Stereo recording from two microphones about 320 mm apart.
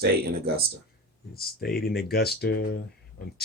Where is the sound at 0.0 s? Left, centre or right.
Right.